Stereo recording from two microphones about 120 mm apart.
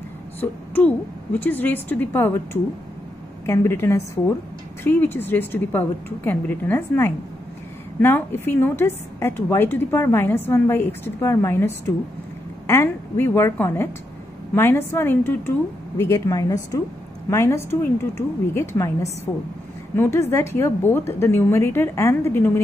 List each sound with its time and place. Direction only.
0.4 s a woman's voice: 15° left (ahead or behind)
20.0 s a woman's voice: 20° left (ahead or behind)